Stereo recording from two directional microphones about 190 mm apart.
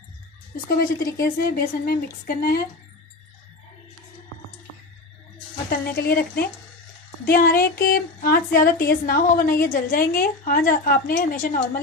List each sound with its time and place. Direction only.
0.7 s a woman's voice: 50° left (ahead or behind)
5.7 s a woman's voice: 50° left (ahead or behind)